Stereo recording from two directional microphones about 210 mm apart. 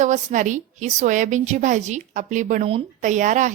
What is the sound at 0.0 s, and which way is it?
A woman's voice, 35° right (ahead or behind).